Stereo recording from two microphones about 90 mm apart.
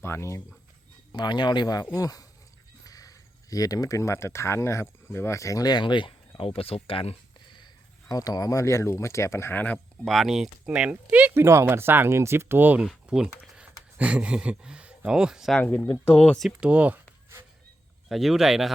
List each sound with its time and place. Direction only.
0.0 s speech: 30° left (ahead or behind)
1.1 s speech: 55° left (ahead or behind); by 5.6 s 35° left (ahead or behind)
5.6 s speech: 55° left (ahead or behind); by 7.1 s 90° left
8.1 s speech: 45° left (ahead or behind); by 9.7 s 20° left (ahead or behind)
9.7 s speech: centre (ahead or behind); by 11.3 s 15° right (ahead or behind)
11.3 s speech: 30° right (ahead or behind)
12.8 s speech: 5° right (ahead or behind)
15.5 s speech: 20° left (ahead or behind)
16.6 s speech: 15° right (ahead or behind)
18.1 s speech: centre (ahead or behind)